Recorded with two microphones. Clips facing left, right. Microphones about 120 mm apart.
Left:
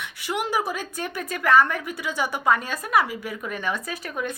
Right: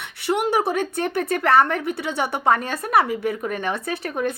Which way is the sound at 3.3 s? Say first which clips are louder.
Right 6 dB; 45° right (ahead or behind).